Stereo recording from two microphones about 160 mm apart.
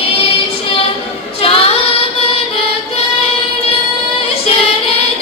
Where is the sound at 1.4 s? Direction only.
35° left (ahead or behind).